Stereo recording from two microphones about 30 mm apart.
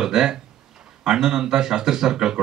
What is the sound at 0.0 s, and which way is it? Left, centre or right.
Speech, centre.